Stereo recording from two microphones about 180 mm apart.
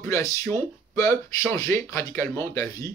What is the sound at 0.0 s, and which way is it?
Speech, 15° left (ahead or behind).